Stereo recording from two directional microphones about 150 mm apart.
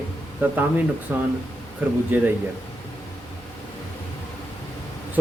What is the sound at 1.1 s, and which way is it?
Speech, 10° right (ahead or behind).